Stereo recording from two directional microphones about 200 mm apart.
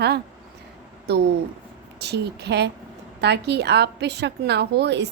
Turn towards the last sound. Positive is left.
turn(degrees=-60)  # may be behind; listen again after turning